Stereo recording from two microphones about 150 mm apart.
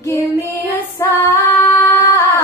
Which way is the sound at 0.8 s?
20° left (ahead or behind).